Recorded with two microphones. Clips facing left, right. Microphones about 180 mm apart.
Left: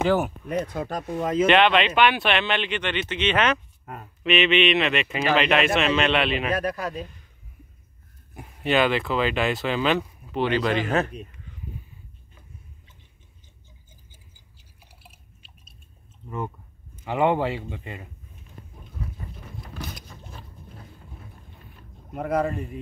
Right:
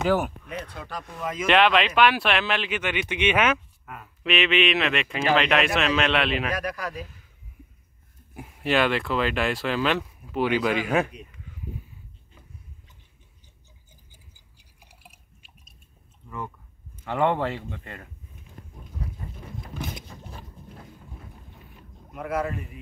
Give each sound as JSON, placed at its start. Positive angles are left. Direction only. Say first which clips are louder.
{"t": 0.7, "sound": "speech", "louder": "left 7 dB", "side_deg": 45}
{"t": 1.2, "sound": "speech", "louder": "left 8 dB", "side_deg": 30}
{"t": 1.5, "sound": "speech", "louder": "right 1 dB", "side_deg": 0}
{"t": 3.8, "sound": "speech", "louder": "left 3 dB", "side_deg": 40}
{"t": 4.2, "sound": "speech", "louder": "left 3 dB", "side_deg": 0}
{"t": 6.5, "sound": "a man's voice", "louder": "left 4 dB", "side_deg": 25}
{"t": 8.4, "sound": "speech", "louder": "left 1 dB", "side_deg": 0}
{"t": 14.3, "sound": "drip", "louder": "left 3 dB", "side_deg": -10}
{"t": 16.3, "sound": "speech", "louder": "left 4 dB", "side_deg": 25}
{"t": 17.0, "sound": "speech", "louder": "left 2 dB", "side_deg": 10}
{"t": 19.7, "sound": "vehicle", "louder": "right 3 dB", "side_deg": -20}
{"t": 22.1, "sound": "speech", "louder": "left 4 dB", "side_deg": 35}